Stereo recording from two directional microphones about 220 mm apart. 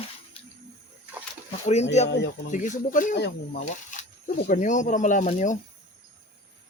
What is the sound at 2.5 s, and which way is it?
Speech, 35° left (ahead or behind).